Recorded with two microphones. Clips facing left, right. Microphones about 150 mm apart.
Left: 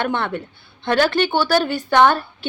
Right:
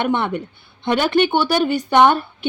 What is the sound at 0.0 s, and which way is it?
A woman's voice, 20° right (ahead or behind).